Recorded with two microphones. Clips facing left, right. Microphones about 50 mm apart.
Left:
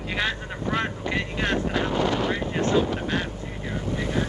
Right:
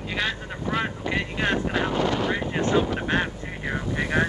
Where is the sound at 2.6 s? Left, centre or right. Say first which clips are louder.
Even; right.